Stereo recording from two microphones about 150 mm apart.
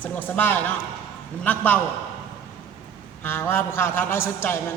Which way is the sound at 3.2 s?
15° left (ahead or behind).